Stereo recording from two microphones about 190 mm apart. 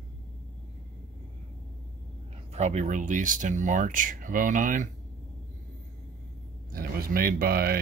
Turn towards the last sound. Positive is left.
turn(degrees=-50)  # may be behind; listen again after turning